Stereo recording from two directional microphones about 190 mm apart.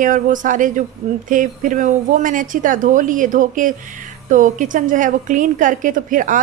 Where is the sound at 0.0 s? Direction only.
45° right (ahead or behind).